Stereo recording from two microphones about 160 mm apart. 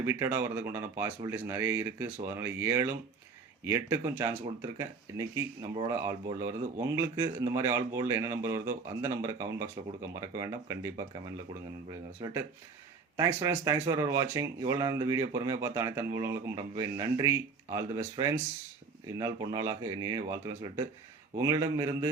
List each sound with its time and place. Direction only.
0.0 s speech: 15° right (ahead or behind)
12.2 s speech: 15° right (ahead or behind)